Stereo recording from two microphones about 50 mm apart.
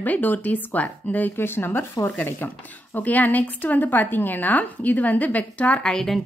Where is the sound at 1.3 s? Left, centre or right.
Left.